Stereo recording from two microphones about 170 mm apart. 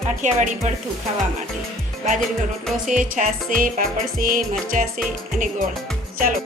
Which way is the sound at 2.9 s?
50° right (ahead or behind).